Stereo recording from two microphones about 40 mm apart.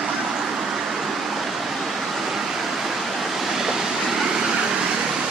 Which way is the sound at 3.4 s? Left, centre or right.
Centre.